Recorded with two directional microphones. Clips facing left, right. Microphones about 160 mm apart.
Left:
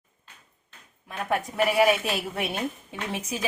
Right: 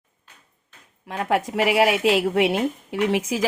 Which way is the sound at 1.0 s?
90° right.